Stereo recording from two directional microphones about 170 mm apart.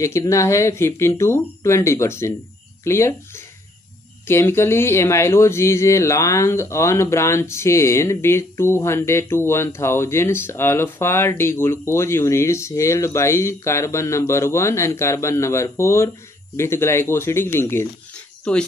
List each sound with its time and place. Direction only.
0.0 s speech: 15° left (ahead or behind)